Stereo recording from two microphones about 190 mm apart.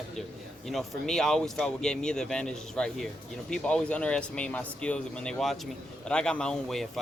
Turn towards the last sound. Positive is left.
turn(degrees=5)  # may be behind; listen again after turning